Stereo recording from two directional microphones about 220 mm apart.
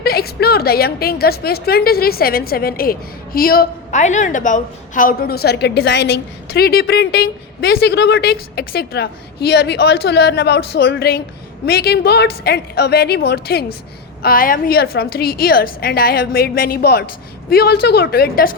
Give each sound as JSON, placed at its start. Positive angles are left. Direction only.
{"t": 0.0, "sound": "a woman's voice", "side_deg": 45}